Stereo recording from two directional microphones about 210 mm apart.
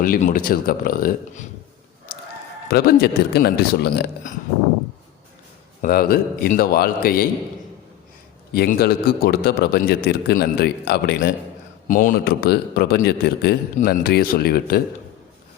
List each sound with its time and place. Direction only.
0.0 s a man's voice: 40° left (ahead or behind)
2.6 s a man's voice: 45° left (ahead or behind)
5.8 s a man's voice: 45° left (ahead or behind)
8.5 s a man's voice: 50° left (ahead or behind)